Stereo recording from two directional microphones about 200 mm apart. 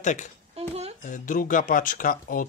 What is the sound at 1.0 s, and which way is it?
Speech, 40° left (ahead or behind).